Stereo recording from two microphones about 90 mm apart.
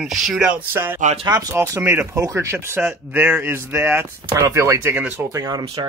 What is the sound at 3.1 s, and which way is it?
Speech, 20° right (ahead or behind).